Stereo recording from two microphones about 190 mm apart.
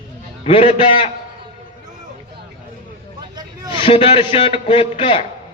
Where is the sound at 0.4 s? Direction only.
30° left (ahead or behind).